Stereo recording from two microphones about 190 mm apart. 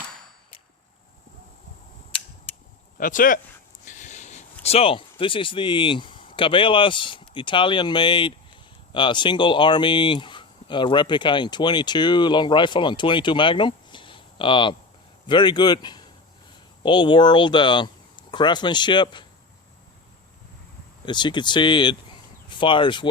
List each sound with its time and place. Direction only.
3.0 s speech: 45° left (ahead or behind)
3.8 s a sound: 40° left (ahead or behind)
4.6 s speech: 30° left (ahead or behind)
21.1 s speech: 25° left (ahead or behind)